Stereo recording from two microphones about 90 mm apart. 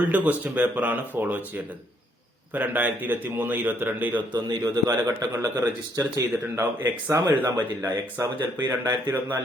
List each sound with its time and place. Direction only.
0.0 s a man's voice: 20° right (ahead or behind)
2.5 s a man's voice: 20° right (ahead or behind)
4.3 s a man's voice: 50° right (ahead or behind)
4.9 s speech: 35° right (ahead or behind)